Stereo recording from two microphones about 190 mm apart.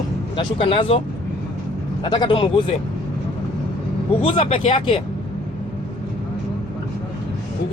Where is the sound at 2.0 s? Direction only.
25° left (ahead or behind).